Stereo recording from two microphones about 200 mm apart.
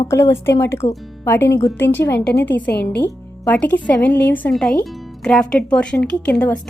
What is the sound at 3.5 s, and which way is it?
A woman's voice, 10° left (ahead or behind).